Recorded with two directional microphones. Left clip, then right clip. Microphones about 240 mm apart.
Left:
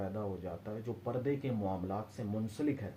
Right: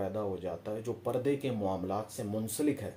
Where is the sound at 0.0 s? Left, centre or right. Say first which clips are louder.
Right 5 dB; right.